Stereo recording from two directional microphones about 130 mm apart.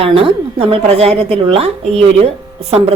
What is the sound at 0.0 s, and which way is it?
A woman's voice, 45° right (ahead or behind).